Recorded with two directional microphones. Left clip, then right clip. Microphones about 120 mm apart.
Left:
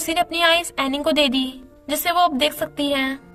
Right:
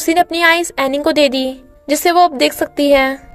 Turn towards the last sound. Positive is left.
turn(degrees=-65)  # may be behind; listen again after turning